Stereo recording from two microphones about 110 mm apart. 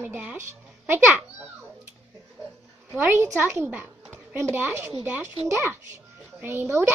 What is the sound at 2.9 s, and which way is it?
A child's voice, 20° right (ahead or behind).